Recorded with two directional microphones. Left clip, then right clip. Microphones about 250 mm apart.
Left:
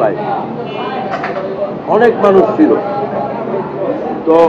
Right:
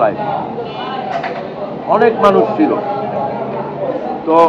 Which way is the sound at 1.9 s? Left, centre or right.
Centre.